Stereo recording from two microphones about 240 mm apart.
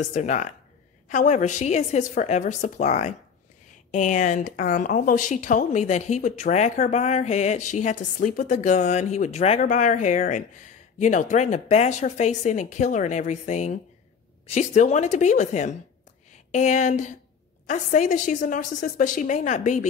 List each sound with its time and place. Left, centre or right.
0.0 s speech: left